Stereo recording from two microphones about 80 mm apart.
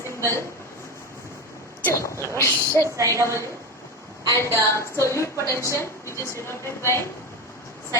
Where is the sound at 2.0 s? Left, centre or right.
Left.